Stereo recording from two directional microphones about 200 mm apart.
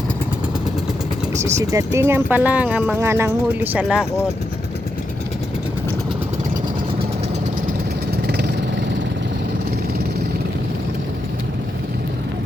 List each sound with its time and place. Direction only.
1.5 s speech: 15° right (ahead or behind)
8.3 s vehicle: 55° right (ahead or behind)